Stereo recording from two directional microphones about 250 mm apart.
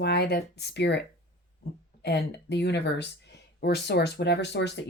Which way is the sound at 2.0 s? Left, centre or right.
Left.